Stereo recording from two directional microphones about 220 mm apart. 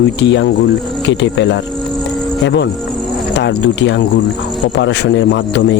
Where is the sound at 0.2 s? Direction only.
55° left (ahead or behind).